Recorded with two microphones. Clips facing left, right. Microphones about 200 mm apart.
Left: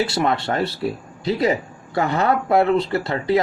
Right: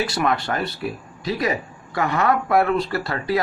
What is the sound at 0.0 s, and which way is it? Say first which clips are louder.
Speech: left 2 dB; 25° left (ahead or behind).